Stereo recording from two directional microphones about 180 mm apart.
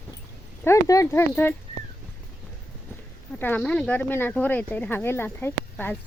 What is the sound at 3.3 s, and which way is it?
Speech, 10° left (ahead or behind).